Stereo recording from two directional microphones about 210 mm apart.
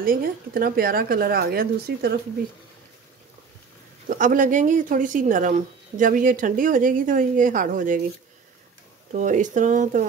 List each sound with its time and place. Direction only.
0.0 s speech: 45° right (ahead or behind)
4.1 s speech: 40° right (ahead or behind)
9.1 s speech: 35° right (ahead or behind)